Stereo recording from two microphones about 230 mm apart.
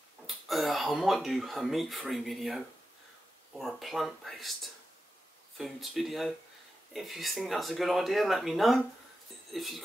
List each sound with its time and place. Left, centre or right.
0.3 s speech: centre
5.6 s speech: centre